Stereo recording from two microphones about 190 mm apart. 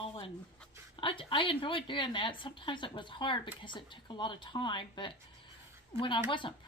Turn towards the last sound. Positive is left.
turn(degrees=25)  # may be behind; listen again after turning